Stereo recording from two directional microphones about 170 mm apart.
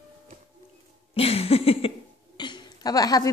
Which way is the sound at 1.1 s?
35° left (ahead or behind).